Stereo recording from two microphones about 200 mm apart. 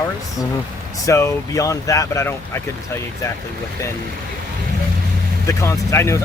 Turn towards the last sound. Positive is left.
turn(degrees=15)  # may be behind; listen again after turning